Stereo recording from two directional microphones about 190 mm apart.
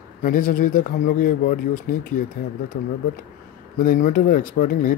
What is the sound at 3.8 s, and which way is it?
Speech, 45° left (ahead or behind).